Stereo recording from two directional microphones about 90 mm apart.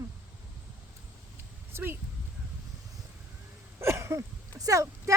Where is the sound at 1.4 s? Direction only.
25° right (ahead or behind).